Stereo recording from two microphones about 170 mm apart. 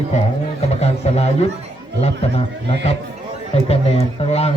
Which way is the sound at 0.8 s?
40° left (ahead or behind).